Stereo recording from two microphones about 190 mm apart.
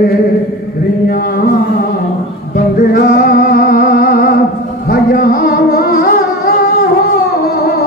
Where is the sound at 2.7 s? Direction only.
55° left (ahead or behind).